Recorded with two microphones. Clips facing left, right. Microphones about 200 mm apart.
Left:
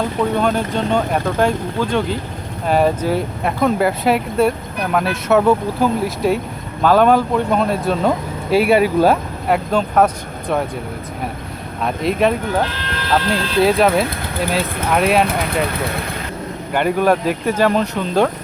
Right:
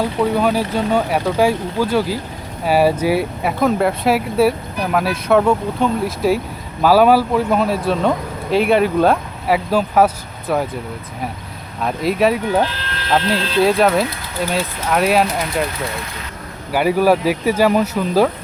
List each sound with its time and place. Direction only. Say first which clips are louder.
0.0 s speech: right 1 dB; 5° right (ahead or behind)
11.8 s speech: even; centre (ahead or behind)
15.3 s speech: left 1 dB; 60° left (ahead or behind)
16.7 s speech: right 1 dB; 5° right (ahead or behind)